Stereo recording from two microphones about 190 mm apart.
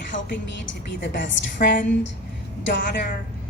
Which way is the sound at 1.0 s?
70° left (ahead or behind).